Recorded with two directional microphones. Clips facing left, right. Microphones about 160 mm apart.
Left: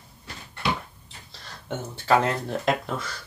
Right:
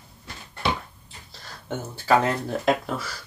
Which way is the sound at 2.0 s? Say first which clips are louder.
Right 1 dB; centre (ahead or behind).